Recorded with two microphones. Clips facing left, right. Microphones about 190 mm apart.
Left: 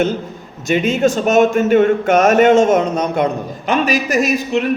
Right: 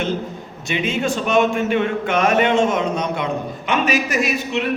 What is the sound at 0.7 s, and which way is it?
A man's voice, 45° left (ahead or behind).